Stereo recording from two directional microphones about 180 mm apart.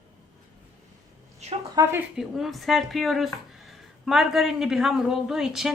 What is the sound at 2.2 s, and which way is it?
Speech, centre (ahead or behind).